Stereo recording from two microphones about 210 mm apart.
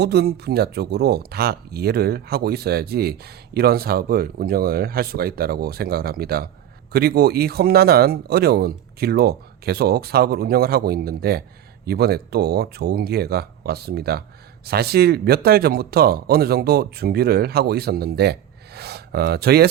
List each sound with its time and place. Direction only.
0.0 s speech: 50° right (ahead or behind)